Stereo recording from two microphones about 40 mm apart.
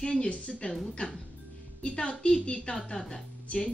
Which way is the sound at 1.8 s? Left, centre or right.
Left.